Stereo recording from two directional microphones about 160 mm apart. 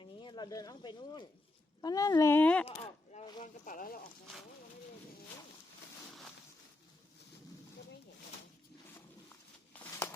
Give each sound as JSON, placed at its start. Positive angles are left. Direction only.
{"t": 0.0, "sound": "speech", "side_deg": 30}
{"t": 2.6, "sound": "a sound", "side_deg": 45}
{"t": 3.4, "sound": "speech", "side_deg": 60}